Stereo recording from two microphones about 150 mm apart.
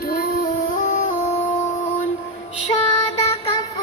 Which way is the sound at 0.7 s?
60° left (ahead or behind).